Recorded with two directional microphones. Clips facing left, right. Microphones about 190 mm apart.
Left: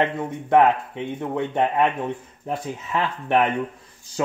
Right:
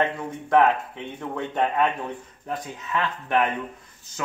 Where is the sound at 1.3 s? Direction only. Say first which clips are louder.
Left 2 dB; 20° left (ahead or behind).